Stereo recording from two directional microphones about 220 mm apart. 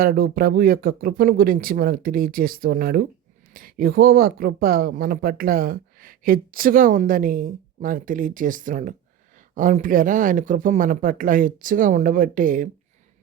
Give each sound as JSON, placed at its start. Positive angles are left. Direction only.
{"t": 0.0, "sound": "speech", "side_deg": -40}